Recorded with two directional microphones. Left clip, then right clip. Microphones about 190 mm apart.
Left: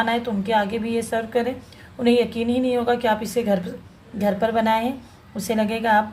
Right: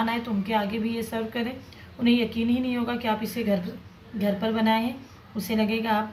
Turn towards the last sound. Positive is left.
turn(degrees=40)  # may be behind; listen again after turning